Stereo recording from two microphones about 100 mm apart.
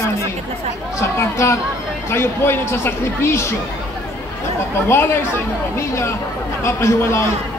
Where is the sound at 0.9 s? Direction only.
30° left (ahead or behind).